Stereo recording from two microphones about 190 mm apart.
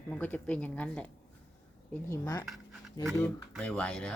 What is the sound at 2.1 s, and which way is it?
Speech, 20° left (ahead or behind).